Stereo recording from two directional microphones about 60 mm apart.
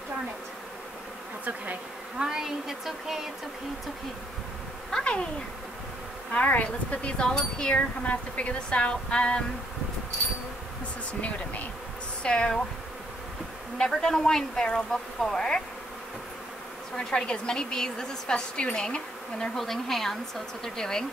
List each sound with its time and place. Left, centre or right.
2.1 s speech: centre
4.9 s speech: centre
6.3 s speech: left
11.1 s a woman's voice: left
13.7 s a woman's voice: centre
16.9 s a woman's voice: centre